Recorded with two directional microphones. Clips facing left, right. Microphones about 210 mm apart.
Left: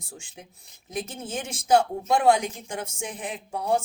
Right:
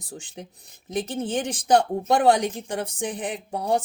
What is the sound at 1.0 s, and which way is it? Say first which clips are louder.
Speech: right 7 dB; 35° right (ahead or behind).